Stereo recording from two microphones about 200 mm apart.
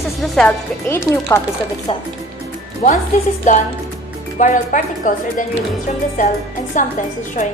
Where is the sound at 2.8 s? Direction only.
35° left (ahead or behind).